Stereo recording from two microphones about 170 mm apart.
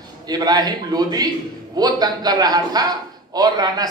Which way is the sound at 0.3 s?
25° right (ahead or behind).